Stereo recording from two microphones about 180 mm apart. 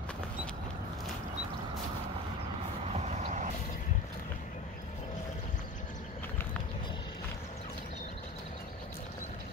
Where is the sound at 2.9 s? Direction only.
35° right (ahead or behind).